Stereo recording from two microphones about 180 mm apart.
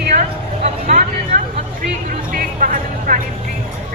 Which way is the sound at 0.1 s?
40° right (ahead or behind).